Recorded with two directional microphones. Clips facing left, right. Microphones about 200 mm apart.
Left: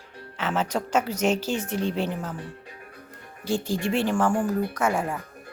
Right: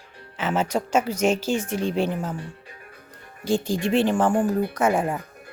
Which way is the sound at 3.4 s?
15° right (ahead or behind).